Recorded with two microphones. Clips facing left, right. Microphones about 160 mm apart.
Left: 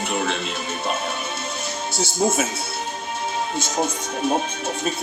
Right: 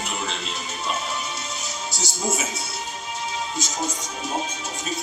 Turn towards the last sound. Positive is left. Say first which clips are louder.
# left 6 dB
turn(degrees=55)  # may be behind; listen again after turning